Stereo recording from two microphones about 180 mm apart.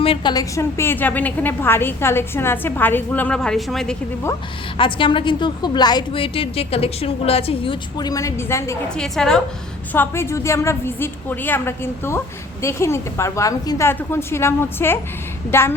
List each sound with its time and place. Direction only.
0.0 s a woman's voice: 30° left (ahead or behind); by 3.9 s 5° left (ahead or behind)
4.8 s a woman's voice: 25° left (ahead or behind)
9.0 s a woman's voice: 5° left (ahead or behind)